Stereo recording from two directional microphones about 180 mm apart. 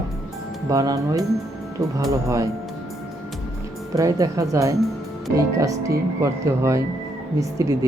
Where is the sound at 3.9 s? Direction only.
20° right (ahead or behind).